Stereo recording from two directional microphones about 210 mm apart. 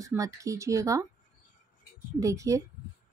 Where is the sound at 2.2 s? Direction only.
15° right (ahead or behind).